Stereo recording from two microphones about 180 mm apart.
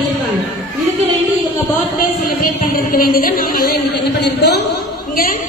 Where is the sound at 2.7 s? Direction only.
55° left (ahead or behind).